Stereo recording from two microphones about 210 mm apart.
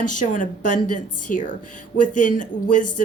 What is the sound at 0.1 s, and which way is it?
Speech, 40° left (ahead or behind).